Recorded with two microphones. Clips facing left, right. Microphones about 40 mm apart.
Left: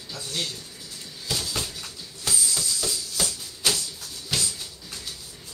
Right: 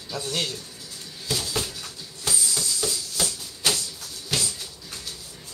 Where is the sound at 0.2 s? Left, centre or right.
Right.